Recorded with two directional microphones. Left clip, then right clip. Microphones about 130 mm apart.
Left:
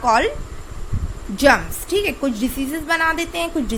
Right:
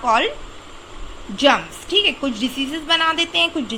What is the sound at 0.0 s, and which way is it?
Speech, 30° left (ahead or behind).